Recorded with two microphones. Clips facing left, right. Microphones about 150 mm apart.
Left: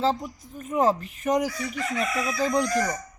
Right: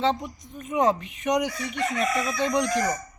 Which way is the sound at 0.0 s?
5° left (ahead or behind).